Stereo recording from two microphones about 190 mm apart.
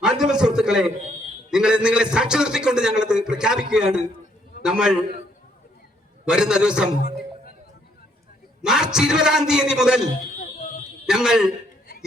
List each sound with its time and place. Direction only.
0.0 s a sound: 5° right (ahead or behind)
1.5 s a man's voice: 5° right (ahead or behind)
6.2 s a man's voice: 5° right (ahead or behind)
8.6 s a man's voice: 5° right (ahead or behind)
11.0 s a man's voice: 5° right (ahead or behind)